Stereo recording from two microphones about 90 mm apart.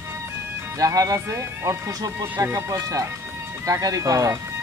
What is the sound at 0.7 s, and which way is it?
Speech, 40° right (ahead or behind).